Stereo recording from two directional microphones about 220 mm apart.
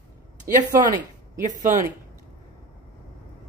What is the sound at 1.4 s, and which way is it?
Speech, 35° right (ahead or behind).